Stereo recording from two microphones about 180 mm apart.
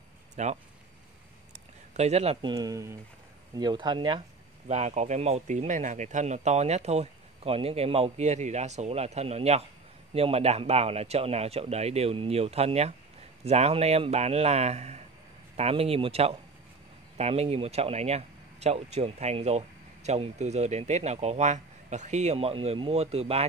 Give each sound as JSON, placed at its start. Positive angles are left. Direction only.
{"t": 0.4, "sound": "speech", "side_deg": -40}
{"t": 1.5, "sound": "a sound", "side_deg": -40}
{"t": 2.5, "sound": "speech", "side_deg": -20}
{"t": 4.6, "sound": "speech", "side_deg": -40}